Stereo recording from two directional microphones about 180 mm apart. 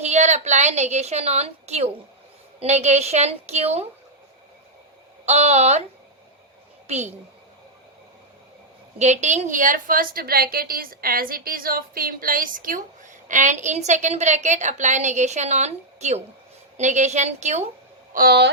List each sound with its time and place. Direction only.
0.0 s a woman's voice: 40° right (ahead or behind)
5.2 s a woman's voice: 40° right (ahead or behind)
6.8 s a woman's voice: 35° right (ahead or behind)
9.0 s a woman's voice: 40° right (ahead or behind)
18.1 s speech: 60° right (ahead or behind)